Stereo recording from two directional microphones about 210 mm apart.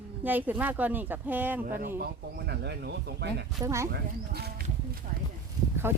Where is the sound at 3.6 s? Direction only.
15° right (ahead or behind).